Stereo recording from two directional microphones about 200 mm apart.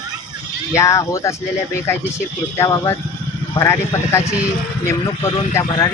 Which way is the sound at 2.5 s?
15° left (ahead or behind).